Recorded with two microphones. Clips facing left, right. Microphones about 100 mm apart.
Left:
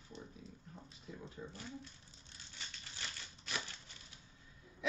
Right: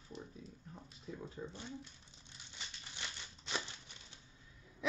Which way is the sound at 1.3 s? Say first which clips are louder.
Right 2 dB; 25° right (ahead or behind).